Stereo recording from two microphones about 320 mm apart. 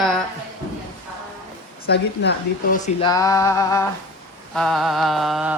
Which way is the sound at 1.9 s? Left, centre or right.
Left.